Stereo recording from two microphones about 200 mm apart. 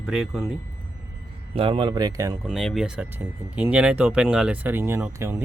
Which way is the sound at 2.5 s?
Centre (ahead or behind).